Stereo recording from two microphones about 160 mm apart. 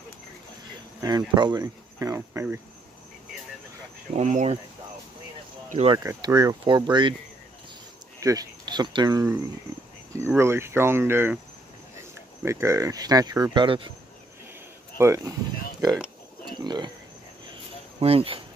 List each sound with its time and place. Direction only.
1.0 s speech: 25° right (ahead or behind)
4.1 s speech: 45° right (ahead or behind)
6.0 s speech: 25° right (ahead or behind)
8.2 s speech: 20° right (ahead or behind)
12.4 s speech: 15° right (ahead or behind)
15.0 s speech: 20° right (ahead or behind)
16.4 s a sound: 25° right (ahead or behind)
18.0 s speech: 35° right (ahead or behind)